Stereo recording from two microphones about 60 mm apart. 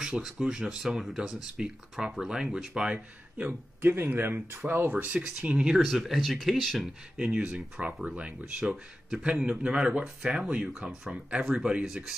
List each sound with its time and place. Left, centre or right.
0.0 s speech: centre
3.3 s speech: right
3.9 s speech: right; by 5.8 s centre
5.8 s speech: centre
7.2 s speech: centre